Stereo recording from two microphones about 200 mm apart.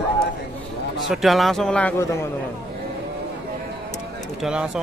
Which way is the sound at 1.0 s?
Centre (ahead or behind).